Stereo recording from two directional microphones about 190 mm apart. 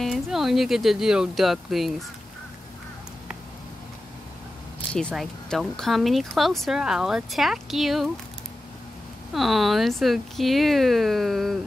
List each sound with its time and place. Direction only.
0.0 s speech: centre (ahead or behind)
4.9 s speech: centre (ahead or behind)
9.3 s speech: centre (ahead or behind)